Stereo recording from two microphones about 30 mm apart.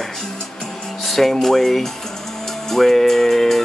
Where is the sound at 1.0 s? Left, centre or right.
Centre.